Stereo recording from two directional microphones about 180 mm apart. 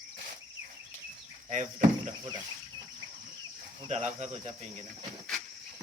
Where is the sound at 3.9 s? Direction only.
40° right (ahead or behind).